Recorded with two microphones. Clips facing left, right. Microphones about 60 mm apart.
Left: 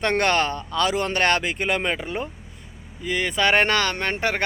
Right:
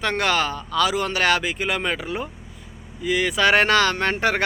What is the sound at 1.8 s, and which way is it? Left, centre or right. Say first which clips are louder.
Speech: even; centre.